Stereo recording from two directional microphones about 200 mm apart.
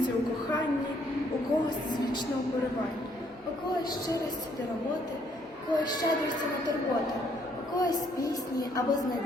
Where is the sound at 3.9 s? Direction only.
20° left (ahead or behind).